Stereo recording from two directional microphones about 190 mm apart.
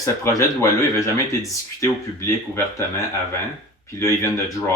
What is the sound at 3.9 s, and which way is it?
Speech, 15° left (ahead or behind).